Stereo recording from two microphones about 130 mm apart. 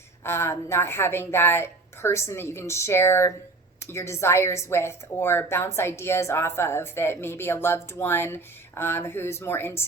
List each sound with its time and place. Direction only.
0.3 s a woman's voice: 20° left (ahead or behind)